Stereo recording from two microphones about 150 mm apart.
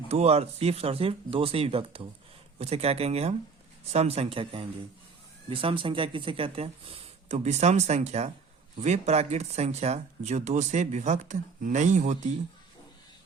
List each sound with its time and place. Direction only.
0.1 s speech: 45° right (ahead or behind)